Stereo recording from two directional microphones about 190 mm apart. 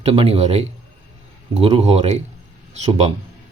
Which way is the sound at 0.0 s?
30° right (ahead or behind).